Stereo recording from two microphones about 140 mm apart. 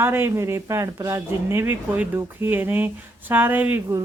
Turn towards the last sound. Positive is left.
turn(degrees=-15)  # may be behind; listen again after turning